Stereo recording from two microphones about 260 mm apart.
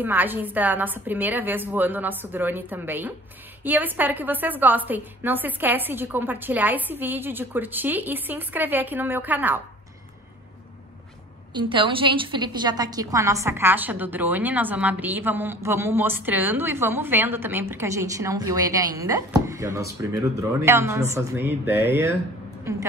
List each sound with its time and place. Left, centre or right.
0.0 s a woman's voice: centre
11.5 s a woman's voice: centre